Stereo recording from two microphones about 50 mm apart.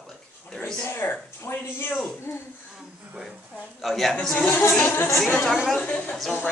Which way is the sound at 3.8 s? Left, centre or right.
Centre.